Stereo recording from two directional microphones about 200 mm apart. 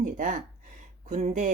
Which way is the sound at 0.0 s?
40° right (ahead or behind).